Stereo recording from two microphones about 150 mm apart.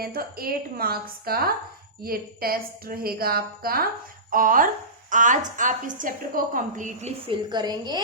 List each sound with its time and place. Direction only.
0.0 s a woman's voice: 85° right
4.3 s a woman's voice: 65° right (ahead or behind)
7.3 s a woman's voice: 30° right (ahead or behind)